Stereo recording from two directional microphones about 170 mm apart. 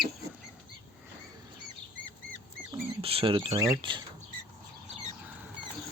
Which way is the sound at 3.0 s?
30° right (ahead or behind).